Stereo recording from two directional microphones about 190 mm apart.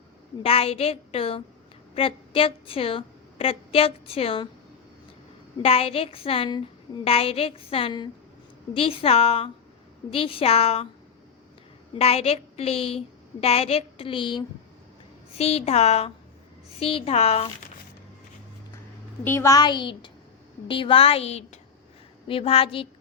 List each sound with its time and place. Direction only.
0.4 s a woman's voice: 30° left (ahead or behind)
5.6 s a woman's voice: 30° left (ahead or behind)
11.9 s a woman's voice: 30° left (ahead or behind)
19.2 s a woman's voice: 15° left (ahead or behind); by 22.9 s 30° left (ahead or behind)